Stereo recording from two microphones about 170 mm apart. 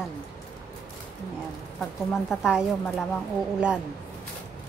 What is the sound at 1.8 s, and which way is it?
Speech, centre (ahead or behind).